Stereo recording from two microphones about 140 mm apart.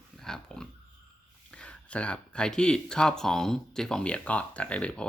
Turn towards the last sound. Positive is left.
turn(degrees=10)  # may be behind; listen again after turning